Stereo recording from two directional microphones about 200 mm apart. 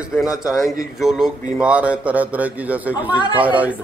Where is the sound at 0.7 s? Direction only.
Centre (ahead or behind).